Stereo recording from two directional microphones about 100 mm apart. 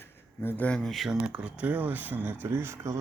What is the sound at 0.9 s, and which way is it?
Speech, centre (ahead or behind).